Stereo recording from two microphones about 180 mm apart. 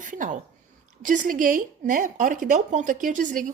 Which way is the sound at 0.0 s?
45° right (ahead or behind).